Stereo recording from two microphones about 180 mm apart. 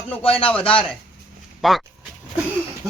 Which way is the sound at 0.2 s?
30° left (ahead or behind).